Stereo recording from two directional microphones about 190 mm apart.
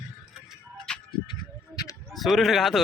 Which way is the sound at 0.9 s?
5° left (ahead or behind).